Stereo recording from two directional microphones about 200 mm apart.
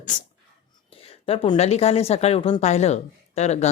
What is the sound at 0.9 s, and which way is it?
Speech, 30° left (ahead or behind).